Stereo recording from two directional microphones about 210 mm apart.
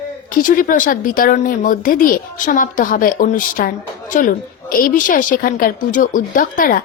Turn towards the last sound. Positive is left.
turn(degrees=40)  # may be behind; listen again after turning